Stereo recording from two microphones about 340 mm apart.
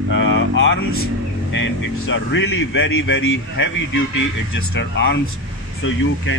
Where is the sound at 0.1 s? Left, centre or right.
Left.